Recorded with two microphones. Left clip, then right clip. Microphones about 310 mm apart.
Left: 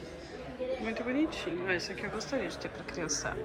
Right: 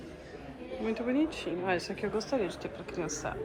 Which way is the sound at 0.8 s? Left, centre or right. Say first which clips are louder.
Right 5 dB; centre.